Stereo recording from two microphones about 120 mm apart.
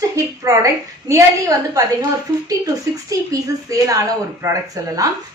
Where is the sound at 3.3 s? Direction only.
30° right (ahead or behind).